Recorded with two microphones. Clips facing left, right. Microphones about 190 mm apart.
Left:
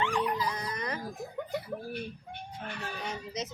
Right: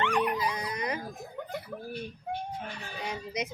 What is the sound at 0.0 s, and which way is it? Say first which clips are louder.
Dog: right 2 dB; 65° right (ahead or behind).